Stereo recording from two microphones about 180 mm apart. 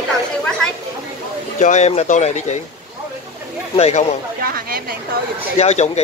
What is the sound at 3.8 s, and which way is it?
Speech, 40° left (ahead or behind).